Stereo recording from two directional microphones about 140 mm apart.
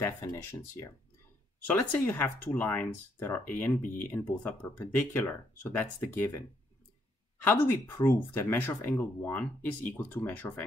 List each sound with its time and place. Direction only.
0.0 s speech: 15° left (ahead or behind)
7.4 s speech: 15° left (ahead or behind)